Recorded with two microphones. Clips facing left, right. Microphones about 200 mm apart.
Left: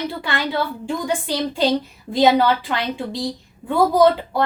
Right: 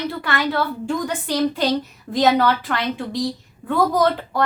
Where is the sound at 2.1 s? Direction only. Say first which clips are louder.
Left 2 dB; 15° left (ahead or behind).